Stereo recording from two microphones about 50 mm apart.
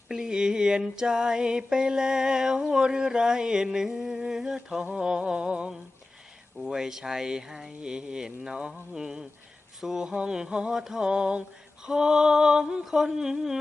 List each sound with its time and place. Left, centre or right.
0.1 s mantra: centre
4.9 s a sound: centre
6.7 s speech: centre